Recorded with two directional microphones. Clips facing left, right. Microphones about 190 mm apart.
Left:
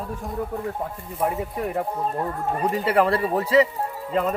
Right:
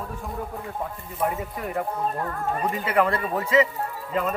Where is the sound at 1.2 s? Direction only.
25° left (ahead or behind).